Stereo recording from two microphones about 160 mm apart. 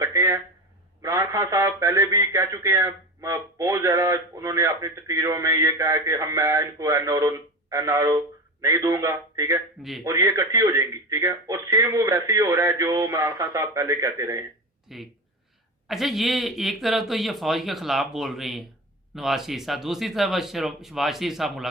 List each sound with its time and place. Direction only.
0.0 s a sound: 20° right (ahead or behind)
1.0 s speech: 20° right (ahead or behind)
14.8 s speech: centre (ahead or behind)